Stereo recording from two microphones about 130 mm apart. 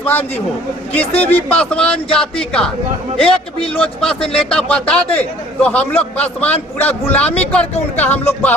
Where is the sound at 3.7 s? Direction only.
10° left (ahead or behind).